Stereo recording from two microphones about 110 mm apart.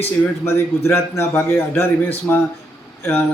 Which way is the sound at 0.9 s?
25° left (ahead or behind).